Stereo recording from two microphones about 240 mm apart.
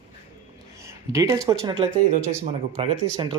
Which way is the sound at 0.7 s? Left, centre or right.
Centre.